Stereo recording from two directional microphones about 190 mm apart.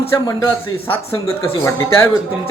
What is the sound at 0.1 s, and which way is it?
Speech, 15° left (ahead or behind).